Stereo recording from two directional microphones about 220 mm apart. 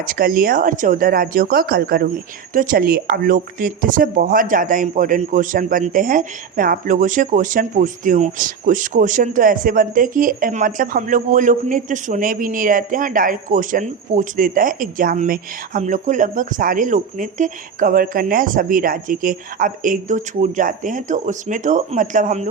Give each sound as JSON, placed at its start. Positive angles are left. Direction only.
{"t": 0.0, "sound": "speech", "side_deg": -40}